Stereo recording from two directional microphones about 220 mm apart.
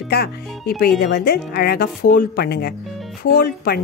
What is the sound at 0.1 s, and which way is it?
Speech, 45° left (ahead or behind).